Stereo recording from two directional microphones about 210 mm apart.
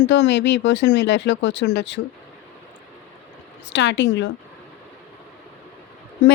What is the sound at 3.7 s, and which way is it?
Speech, 55° left (ahead or behind).